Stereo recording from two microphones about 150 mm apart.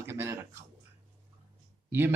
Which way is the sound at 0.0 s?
15° right (ahead or behind).